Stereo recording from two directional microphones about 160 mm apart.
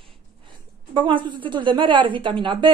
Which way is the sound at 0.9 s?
30° right (ahead or behind).